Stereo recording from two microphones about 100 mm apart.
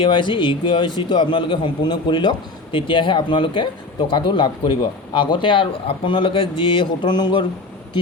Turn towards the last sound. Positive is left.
turn(degrees=50)  # may be behind; listen again after turning